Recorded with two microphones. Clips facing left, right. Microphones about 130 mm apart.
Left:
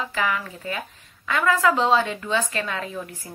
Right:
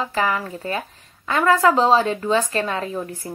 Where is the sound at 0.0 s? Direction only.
35° right (ahead or behind).